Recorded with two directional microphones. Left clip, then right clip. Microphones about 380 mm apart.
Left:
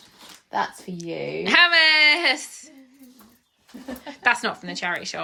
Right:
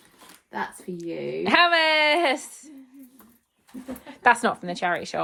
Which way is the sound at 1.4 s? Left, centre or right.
Centre.